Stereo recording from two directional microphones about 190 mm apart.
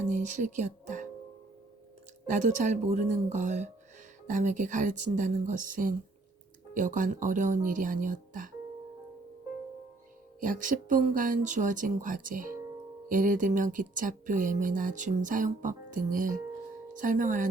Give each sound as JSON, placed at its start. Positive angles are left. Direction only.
{"t": 0.0, "sound": "speech", "side_deg": -40}
{"t": 2.2, "sound": "speech", "side_deg": -40}
{"t": 10.4, "sound": "speech", "side_deg": -45}